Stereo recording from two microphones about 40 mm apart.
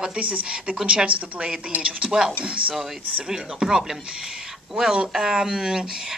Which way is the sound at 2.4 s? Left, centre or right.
Right.